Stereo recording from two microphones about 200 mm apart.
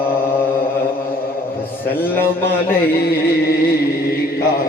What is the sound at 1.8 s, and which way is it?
A man's voice, 10° left (ahead or behind).